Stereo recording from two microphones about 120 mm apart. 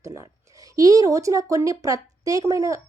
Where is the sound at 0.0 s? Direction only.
25° right (ahead or behind).